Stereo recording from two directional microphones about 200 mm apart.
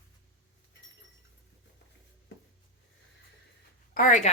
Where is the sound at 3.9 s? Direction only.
40° left (ahead or behind).